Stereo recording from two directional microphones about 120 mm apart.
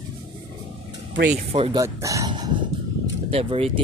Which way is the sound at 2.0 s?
30° right (ahead or behind).